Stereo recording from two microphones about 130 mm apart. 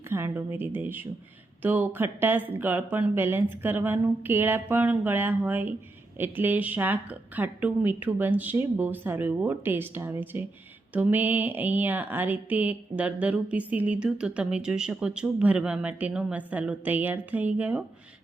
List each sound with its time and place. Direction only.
0.1 s speech: 15° right (ahead or behind)